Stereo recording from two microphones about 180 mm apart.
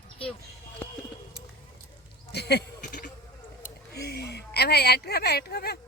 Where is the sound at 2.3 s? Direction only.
65° left (ahead or behind).